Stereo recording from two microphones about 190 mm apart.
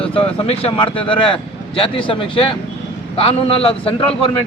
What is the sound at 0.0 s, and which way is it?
Speech, 30° left (ahead or behind).